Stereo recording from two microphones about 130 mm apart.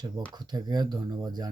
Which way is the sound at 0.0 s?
35° right (ahead or behind).